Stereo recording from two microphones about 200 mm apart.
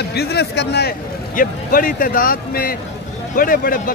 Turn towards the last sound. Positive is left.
turn(degrees=45)  # may be behind; listen again after turning